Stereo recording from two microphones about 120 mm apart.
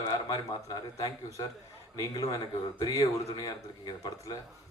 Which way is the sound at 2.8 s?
30° left (ahead or behind).